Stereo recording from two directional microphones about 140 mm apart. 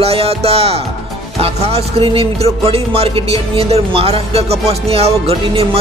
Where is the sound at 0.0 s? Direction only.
45° right (ahead or behind).